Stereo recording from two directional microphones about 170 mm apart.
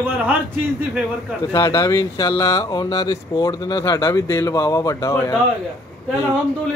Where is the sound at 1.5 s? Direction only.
20° left (ahead or behind).